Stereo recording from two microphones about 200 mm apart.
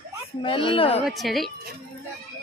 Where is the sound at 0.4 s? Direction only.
25° left (ahead or behind).